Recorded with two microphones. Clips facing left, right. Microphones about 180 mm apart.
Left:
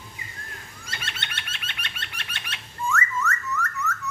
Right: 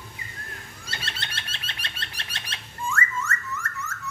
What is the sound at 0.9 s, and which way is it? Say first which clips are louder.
Bird: even; 35° right (ahead or behind).